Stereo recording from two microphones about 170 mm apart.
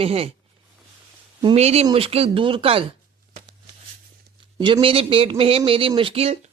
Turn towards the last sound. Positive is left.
turn(degrees=-35)  # may be behind; listen again after turning